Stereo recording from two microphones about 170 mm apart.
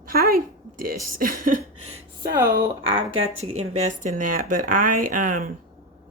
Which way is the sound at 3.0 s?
40° right (ahead or behind).